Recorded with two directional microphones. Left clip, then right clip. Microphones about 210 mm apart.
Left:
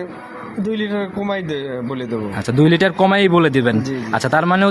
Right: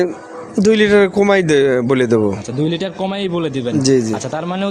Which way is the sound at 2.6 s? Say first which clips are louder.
Left 8 dB; 30° left (ahead or behind).